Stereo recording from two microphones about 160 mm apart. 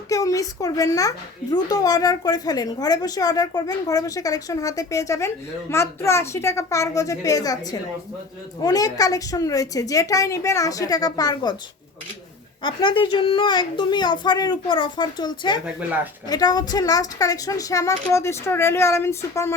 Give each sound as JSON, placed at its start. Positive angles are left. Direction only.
{"t": 0.1, "sound": "a woman's voice", "side_deg": 20}
{"t": 12.6, "sound": "a woman's voice", "side_deg": 30}